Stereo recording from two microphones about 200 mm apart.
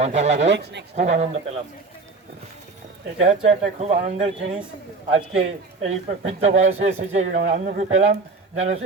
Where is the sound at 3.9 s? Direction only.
35° right (ahead or behind).